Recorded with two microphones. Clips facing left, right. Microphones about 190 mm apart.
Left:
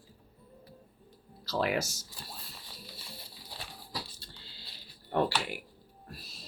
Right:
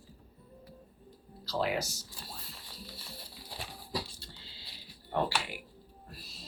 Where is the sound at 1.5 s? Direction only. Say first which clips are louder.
Left 2 dB; 70° left (ahead or behind).